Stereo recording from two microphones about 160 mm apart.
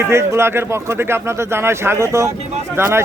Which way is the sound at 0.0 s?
15° right (ahead or behind).